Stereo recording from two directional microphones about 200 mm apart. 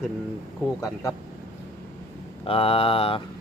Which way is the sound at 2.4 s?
30° left (ahead or behind).